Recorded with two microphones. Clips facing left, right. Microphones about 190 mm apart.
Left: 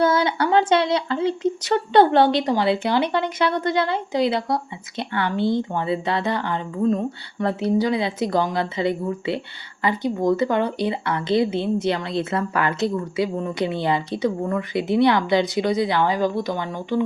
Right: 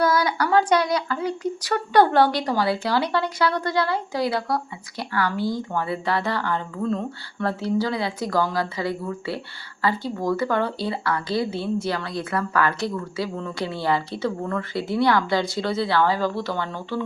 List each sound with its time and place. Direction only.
0.0 s speech: 25° left (ahead or behind)